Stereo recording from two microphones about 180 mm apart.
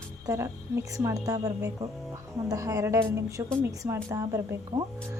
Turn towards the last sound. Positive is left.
turn(degrees=-20)  # may be behind; listen again after turning